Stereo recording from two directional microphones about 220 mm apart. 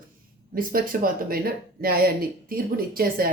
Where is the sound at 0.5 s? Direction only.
40° right (ahead or behind).